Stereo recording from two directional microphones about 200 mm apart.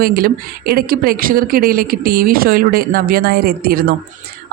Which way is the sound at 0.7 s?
50° right (ahead or behind).